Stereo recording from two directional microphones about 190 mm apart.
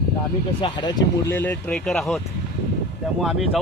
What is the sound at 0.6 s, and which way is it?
Speech, 25° left (ahead or behind).